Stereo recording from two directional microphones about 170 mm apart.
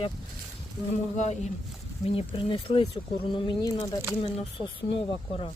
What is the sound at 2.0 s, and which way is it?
Speech, 35° left (ahead or behind).